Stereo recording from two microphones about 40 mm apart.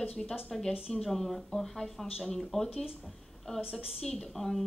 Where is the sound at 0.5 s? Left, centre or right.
Centre.